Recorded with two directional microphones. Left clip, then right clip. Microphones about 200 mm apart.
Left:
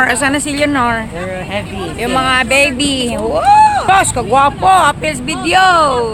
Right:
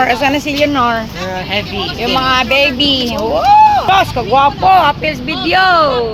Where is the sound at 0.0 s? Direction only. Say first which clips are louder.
Right 1 dB; 5° left (ahead or behind).